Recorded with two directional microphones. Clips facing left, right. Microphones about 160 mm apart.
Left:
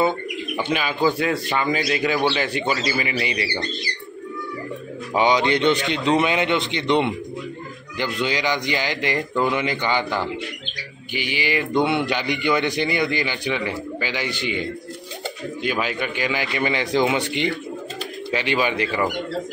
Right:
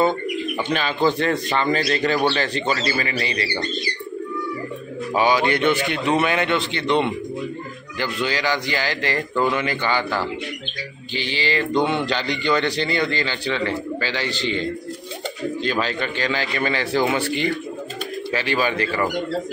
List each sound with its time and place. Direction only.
0.7 s a man's voice: 10° left (ahead or behind)
5.1 s a man's voice: 20° left (ahead or behind)